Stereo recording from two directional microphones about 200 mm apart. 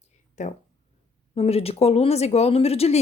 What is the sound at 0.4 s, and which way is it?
Speech, 35° left (ahead or behind).